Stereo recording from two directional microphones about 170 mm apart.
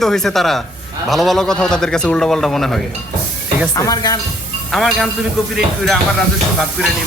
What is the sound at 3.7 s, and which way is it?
Speech, 20° left (ahead or behind).